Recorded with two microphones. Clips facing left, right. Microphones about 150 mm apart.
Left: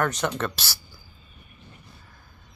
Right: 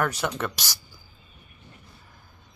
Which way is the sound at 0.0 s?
5° right (ahead or behind).